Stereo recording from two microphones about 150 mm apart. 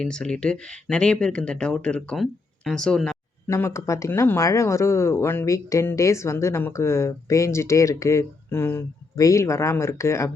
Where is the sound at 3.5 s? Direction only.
15° left (ahead or behind).